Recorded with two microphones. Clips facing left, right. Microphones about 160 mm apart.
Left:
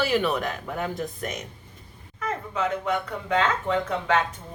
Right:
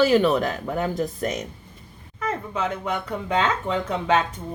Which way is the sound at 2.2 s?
20° right (ahead or behind).